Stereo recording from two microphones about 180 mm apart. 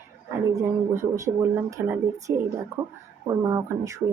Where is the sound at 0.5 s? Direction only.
15° right (ahead or behind).